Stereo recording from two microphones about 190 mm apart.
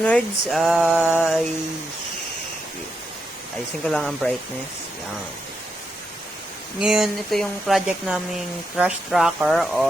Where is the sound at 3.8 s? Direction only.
Centre (ahead or behind).